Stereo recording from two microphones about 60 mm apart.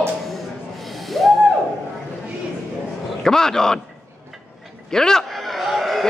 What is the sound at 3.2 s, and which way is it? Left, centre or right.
Speech, centre.